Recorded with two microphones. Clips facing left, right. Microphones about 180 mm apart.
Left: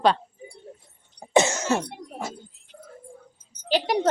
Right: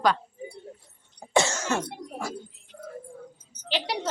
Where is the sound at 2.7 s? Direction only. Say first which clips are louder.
Right 5 dB; 70° right (ahead or behind).